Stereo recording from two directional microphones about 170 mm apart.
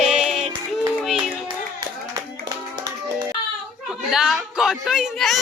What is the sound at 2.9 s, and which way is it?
Music, 25° right (ahead or behind).